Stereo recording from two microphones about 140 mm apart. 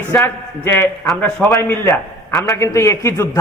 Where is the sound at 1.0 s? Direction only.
Centre (ahead or behind).